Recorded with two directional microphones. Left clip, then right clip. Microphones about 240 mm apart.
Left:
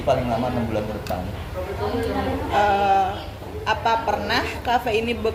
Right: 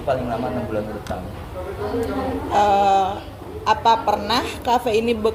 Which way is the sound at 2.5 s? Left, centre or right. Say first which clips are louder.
Right 2 dB; right.